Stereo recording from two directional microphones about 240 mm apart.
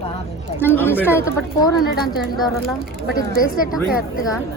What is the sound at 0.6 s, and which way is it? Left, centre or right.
A woman's voice, centre.